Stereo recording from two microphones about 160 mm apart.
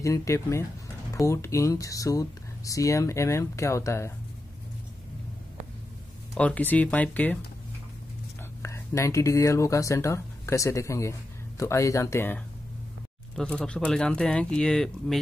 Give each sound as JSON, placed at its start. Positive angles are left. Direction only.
{"t": 0.0, "sound": "speech", "side_deg": 20}
{"t": 6.3, "sound": "speech", "side_deg": 10}
{"t": 8.6, "sound": "speech", "side_deg": 20}
{"t": 13.4, "sound": "speech", "side_deg": 5}